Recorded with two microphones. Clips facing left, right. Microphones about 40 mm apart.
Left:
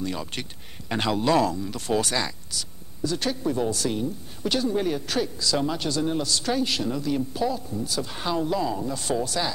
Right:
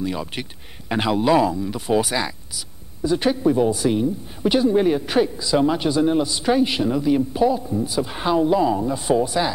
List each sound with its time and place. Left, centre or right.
0.0 s speech: centre